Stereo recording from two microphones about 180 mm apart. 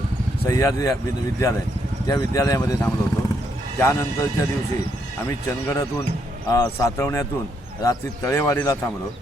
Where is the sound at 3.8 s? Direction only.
15° left (ahead or behind).